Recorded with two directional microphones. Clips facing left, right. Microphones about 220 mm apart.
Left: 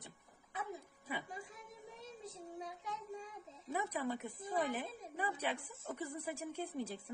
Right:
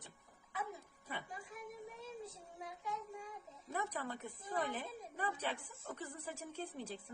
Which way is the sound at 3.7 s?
10° left (ahead or behind).